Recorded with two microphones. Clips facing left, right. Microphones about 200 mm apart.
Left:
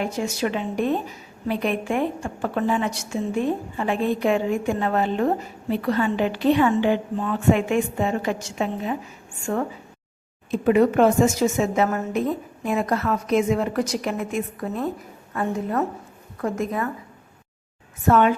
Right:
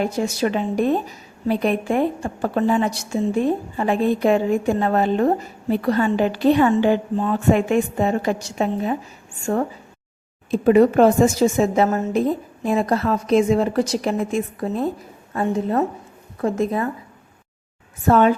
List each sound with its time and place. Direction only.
0.0 s a woman's voice: 35° right (ahead or behind)
10.5 s a woman's voice: 35° right (ahead or behind)
18.1 s a woman's voice: 35° right (ahead or behind)